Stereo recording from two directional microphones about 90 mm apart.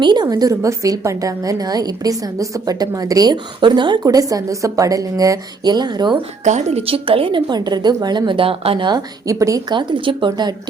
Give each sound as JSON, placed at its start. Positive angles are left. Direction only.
{"t": 0.0, "sound": "a woman's voice", "side_deg": -55}
{"t": 4.0, "sound": "a woman's voice", "side_deg": -40}
{"t": 6.8, "sound": "speech", "side_deg": -90}
{"t": 7.5, "sound": "a woman's voice", "side_deg": -50}
{"t": 9.2, "sound": "a woman's voice", "side_deg": -35}
{"t": 9.6, "sound": "speech", "side_deg": -60}